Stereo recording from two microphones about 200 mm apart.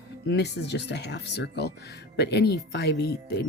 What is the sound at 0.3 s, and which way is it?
Speech, 55° left (ahead or behind).